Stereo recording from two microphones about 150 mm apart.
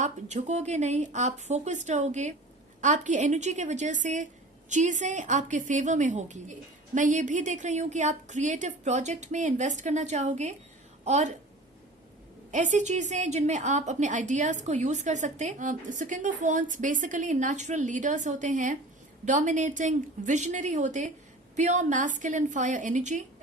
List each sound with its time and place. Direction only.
0.0 s a woman's voice: 50° right (ahead or behind)
12.5 s a woman's voice: 55° right (ahead or behind)